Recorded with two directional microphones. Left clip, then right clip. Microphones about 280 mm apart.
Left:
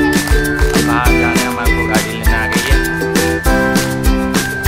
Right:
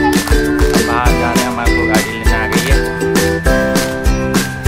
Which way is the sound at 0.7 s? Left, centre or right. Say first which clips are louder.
Left 3 dB; centre.